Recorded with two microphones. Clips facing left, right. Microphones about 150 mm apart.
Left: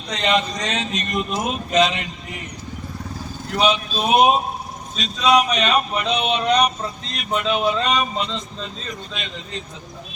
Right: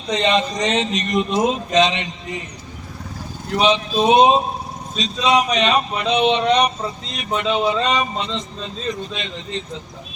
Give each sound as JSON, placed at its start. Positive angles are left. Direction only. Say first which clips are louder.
{"t": 0.1, "sound": "a man's voice", "louder": "right 3 dB", "side_deg": -25}
{"t": 3.5, "sound": "a man's voice", "louder": "right 3 dB", "side_deg": -25}